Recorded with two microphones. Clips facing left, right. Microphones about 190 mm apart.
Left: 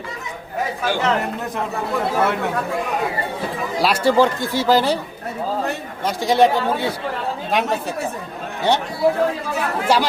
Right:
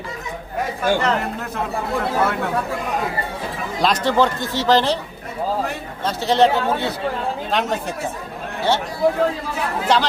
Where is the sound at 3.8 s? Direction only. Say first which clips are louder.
Left 2 dB; 10° left (ahead or behind).